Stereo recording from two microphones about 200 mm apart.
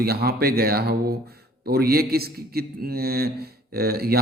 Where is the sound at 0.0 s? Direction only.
50° right (ahead or behind).